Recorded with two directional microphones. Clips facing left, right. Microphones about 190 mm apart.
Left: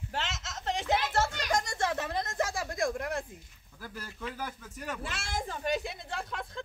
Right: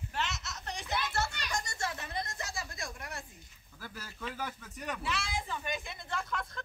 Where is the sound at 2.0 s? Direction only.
70° left (ahead or behind).